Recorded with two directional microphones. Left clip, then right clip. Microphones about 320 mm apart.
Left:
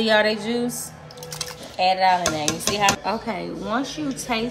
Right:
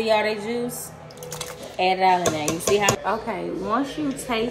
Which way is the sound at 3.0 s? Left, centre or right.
Left.